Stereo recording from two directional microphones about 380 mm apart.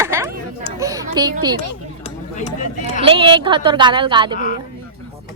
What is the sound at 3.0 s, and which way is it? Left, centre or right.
A woman's voice, centre.